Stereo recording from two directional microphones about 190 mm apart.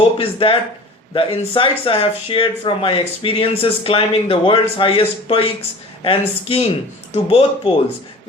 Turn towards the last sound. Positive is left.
turn(degrees=30)  # may be behind; listen again after turning